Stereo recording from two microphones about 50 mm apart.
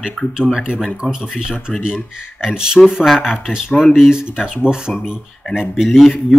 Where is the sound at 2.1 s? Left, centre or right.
Centre.